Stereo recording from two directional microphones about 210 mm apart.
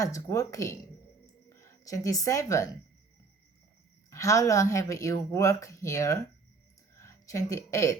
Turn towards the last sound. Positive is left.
turn(degrees=15)  # may be behind; listen again after turning